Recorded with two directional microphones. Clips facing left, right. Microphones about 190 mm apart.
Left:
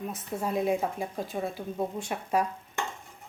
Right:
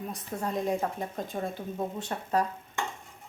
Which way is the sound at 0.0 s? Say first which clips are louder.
Left 1 dB; 5° left (ahead or behind).